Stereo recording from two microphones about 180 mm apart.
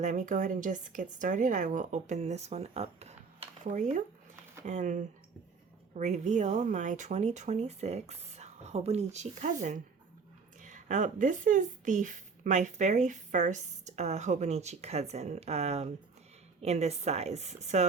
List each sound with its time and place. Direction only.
0.0 s speech: 40° right (ahead or behind)